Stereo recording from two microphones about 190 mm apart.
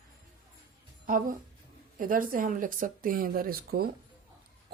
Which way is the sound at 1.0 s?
45° right (ahead or behind).